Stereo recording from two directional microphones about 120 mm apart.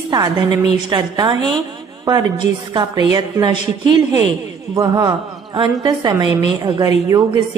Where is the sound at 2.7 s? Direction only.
35° right (ahead or behind).